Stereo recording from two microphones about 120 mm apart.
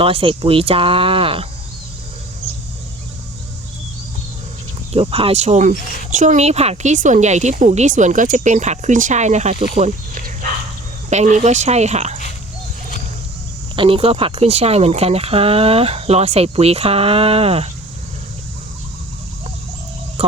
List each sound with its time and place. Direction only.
0.0 s speech: 50° right (ahead or behind)
4.9 s speech: 55° right (ahead or behind)
13.7 s speech: 50° right (ahead or behind)